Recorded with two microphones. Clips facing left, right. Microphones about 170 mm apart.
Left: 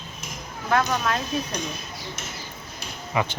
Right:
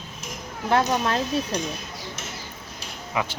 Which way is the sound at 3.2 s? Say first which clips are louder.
Left 2 dB; centre (ahead or behind).